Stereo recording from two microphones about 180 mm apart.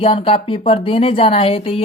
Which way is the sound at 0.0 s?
35° left (ahead or behind).